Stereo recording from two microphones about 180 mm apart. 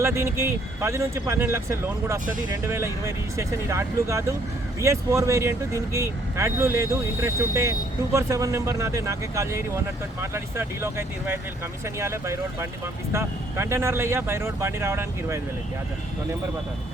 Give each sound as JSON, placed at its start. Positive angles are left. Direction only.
{"t": 0.0, "sound": "speech", "side_deg": -15}